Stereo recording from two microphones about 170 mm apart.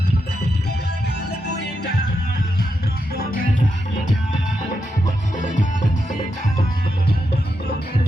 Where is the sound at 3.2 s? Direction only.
55° left (ahead or behind).